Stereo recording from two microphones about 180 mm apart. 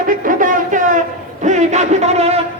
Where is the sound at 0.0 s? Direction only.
50° right (ahead or behind).